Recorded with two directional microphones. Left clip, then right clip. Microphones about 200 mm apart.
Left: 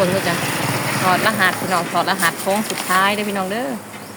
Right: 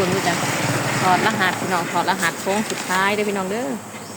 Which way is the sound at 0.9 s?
55° left (ahead or behind).